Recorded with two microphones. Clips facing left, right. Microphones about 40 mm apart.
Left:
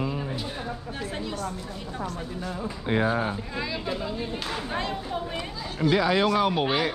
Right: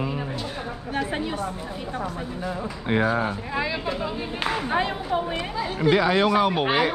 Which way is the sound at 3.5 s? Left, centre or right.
Centre.